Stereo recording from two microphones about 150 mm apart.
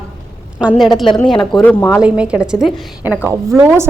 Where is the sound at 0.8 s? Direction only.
Centre (ahead or behind).